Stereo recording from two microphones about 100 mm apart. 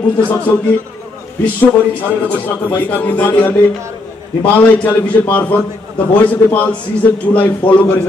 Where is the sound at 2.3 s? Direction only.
15° left (ahead or behind).